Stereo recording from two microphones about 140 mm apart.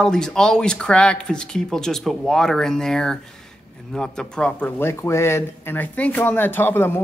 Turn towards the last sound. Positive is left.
turn(degrees=15)  # may be behind; listen again after turning